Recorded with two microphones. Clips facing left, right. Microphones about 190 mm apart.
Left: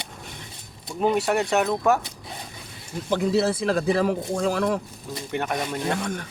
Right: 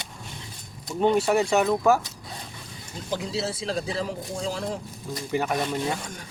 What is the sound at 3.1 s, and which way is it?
Speech, 55° left (ahead or behind).